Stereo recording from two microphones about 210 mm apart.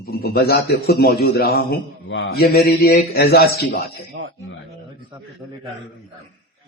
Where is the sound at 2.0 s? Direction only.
65° left (ahead or behind).